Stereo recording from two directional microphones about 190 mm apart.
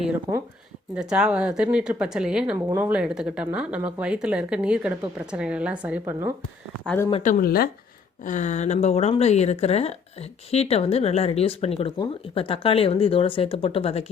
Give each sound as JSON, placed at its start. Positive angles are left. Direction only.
{"t": 0.1, "sound": "speech", "side_deg": -15}
{"t": 0.9, "sound": "speech", "side_deg": -5}
{"t": 6.8, "sound": "speech", "side_deg": 10}
{"t": 7.2, "sound": "speech", "side_deg": 45}
{"t": 8.2, "sound": "speech", "side_deg": 40}